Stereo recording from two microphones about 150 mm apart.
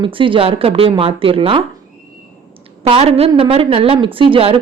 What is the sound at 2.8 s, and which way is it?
Speech, 40° right (ahead or behind).